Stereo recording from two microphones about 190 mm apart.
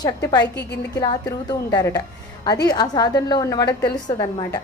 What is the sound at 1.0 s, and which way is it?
A woman's voice, 20° left (ahead or behind).